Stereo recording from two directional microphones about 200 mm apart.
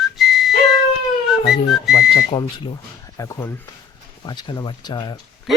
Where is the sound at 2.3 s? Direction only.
25° left (ahead or behind).